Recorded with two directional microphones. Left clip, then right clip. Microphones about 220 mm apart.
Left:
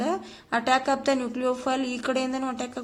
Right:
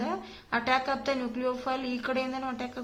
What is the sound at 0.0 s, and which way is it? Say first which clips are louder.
Speech: left 5 dB; 45° left (ahead or behind).